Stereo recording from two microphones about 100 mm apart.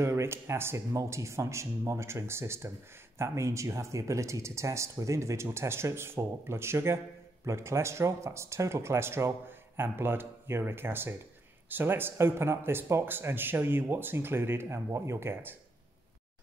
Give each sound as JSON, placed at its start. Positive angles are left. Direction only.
{"t": 0.0, "sound": "speech", "side_deg": -25}